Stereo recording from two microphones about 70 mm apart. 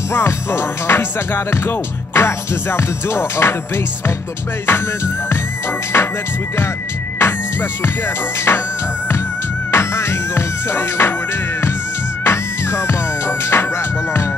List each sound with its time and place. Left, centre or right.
0.1 s music: left
8.5 s music: left
9.7 s music: left
12.3 s music: left